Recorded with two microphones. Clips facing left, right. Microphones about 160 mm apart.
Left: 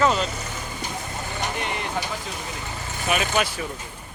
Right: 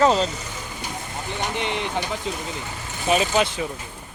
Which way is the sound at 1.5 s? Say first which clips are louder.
Right 3 dB; 20° right (ahead or behind).